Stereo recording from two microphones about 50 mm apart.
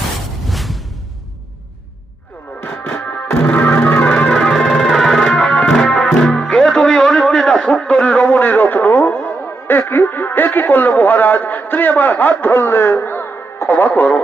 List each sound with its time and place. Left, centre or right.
0.4 s music: centre
3.0 s music: left
3.2 s music: left
4.3 s music: centre
7.9 s radio: left
9.2 s speech: left